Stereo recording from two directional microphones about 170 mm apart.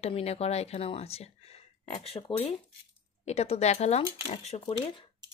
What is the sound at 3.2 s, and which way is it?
Speech, 40° left (ahead or behind).